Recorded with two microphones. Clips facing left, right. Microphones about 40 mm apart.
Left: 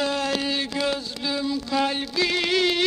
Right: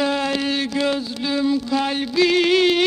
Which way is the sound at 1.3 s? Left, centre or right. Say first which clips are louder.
Right 7 dB; right.